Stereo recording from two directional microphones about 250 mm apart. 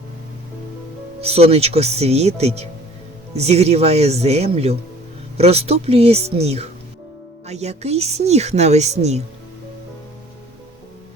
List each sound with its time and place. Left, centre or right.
1.2 s a woman's voice: right